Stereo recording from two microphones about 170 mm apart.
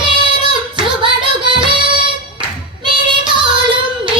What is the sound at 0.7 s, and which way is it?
Singing, 30° right (ahead or behind).